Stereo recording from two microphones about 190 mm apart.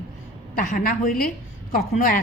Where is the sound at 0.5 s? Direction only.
50° left (ahead or behind).